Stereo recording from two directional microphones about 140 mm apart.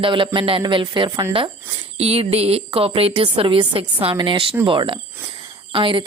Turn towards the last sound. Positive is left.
turn(degrees=-40)  # may be behind; listen again after turning